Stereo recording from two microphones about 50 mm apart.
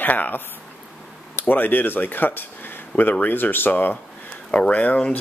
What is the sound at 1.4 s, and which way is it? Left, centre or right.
Speech, left.